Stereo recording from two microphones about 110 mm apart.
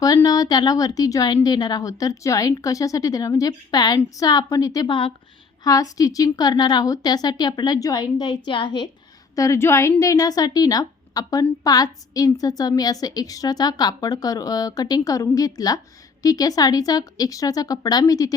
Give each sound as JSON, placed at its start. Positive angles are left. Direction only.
{"t": 0.3, "sound": "a woman's voice", "side_deg": 35}
{"t": 4.9, "sound": "a woman's voice", "side_deg": 50}
{"t": 5.6, "sound": "a woman's voice", "side_deg": 35}
{"t": 9.3, "sound": "a woman's voice", "side_deg": 30}